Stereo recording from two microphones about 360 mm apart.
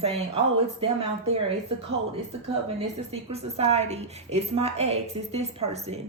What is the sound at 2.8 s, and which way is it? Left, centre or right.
Speech, centre.